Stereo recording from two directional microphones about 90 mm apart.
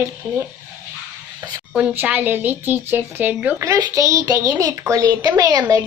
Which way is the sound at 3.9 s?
35° right (ahead or behind).